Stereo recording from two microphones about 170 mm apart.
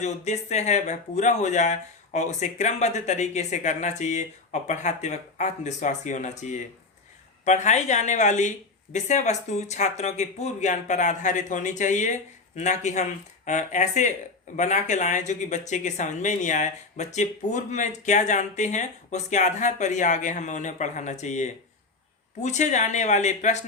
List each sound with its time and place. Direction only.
0.0 s speech: 40° left (ahead or behind)